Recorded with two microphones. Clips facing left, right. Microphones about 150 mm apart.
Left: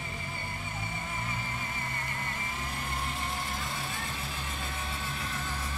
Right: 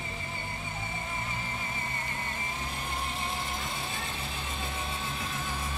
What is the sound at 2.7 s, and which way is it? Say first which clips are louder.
Vehicle: even; 20° right (ahead or behind).